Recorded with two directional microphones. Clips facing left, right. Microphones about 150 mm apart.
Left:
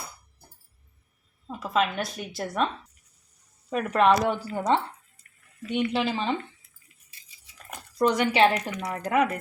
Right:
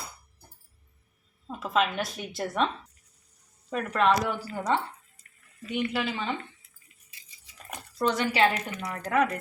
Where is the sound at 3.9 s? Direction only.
20° left (ahead or behind).